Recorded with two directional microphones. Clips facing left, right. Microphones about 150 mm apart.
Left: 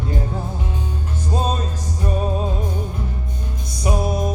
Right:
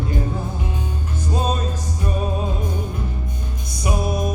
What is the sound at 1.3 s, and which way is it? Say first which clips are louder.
Music: left 1 dB; 30° left (ahead or behind).